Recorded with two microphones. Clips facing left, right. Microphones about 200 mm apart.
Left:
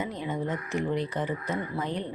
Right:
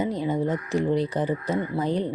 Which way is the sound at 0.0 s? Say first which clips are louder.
Right 7 dB; 35° right (ahead or behind).